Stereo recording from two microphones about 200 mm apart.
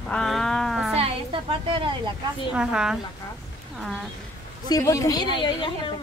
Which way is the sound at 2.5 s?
5° right (ahead or behind).